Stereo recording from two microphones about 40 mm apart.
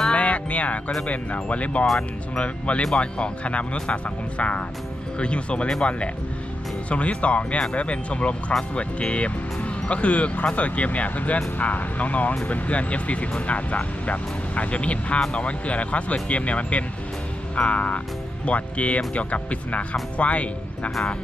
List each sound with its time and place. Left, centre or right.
0.1 s music: left
1.0 s speech: left